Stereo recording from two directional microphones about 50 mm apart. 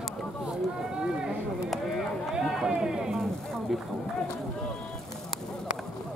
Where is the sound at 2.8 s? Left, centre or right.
Centre.